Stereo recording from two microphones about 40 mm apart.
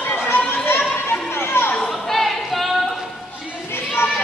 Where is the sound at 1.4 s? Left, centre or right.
Left.